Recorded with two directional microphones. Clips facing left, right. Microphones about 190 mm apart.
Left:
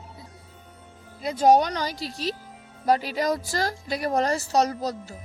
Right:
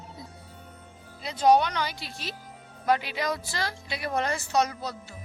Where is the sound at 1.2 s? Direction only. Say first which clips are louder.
Left 3 dB; 45° left (ahead or behind).